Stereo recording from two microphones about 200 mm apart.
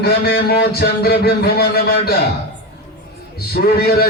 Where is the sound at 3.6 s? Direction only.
50° left (ahead or behind).